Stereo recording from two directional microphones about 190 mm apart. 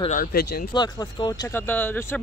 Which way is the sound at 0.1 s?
50° left (ahead or behind).